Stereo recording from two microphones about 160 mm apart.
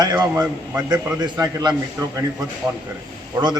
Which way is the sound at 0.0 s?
25° right (ahead or behind).